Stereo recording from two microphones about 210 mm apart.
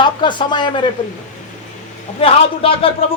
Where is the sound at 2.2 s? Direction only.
25° left (ahead or behind).